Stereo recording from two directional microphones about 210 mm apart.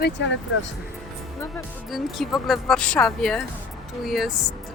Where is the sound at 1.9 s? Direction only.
Centre (ahead or behind).